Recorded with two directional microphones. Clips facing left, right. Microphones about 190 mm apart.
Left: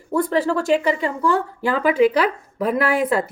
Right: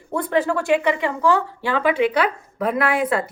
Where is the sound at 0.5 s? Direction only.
40° left (ahead or behind).